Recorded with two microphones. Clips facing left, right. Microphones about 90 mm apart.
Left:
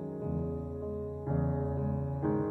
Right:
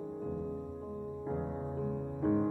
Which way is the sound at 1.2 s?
40° left (ahead or behind).